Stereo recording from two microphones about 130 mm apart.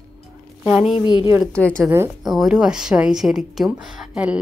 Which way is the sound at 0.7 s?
10° right (ahead or behind).